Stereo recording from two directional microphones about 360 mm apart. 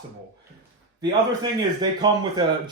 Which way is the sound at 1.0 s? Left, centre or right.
Centre.